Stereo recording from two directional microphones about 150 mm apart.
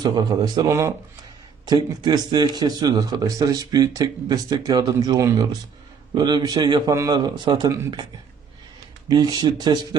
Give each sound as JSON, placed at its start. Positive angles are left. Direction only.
{"t": 0.0, "sound": "a man's voice", "side_deg": -25}
{"t": 1.6, "sound": "a man's voice", "side_deg": -25}
{"t": 9.0, "sound": "a man's voice", "side_deg": -25}